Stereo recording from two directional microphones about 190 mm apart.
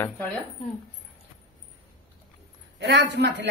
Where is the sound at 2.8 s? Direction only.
70° right (ahead or behind).